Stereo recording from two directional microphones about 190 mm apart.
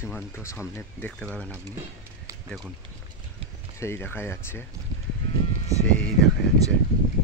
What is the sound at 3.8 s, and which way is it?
Speech, 10° left (ahead or behind).